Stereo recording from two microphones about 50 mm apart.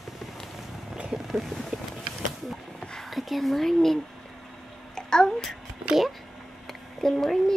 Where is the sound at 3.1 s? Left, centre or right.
Centre.